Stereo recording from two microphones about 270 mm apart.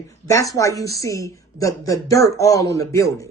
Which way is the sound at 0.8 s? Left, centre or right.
Right.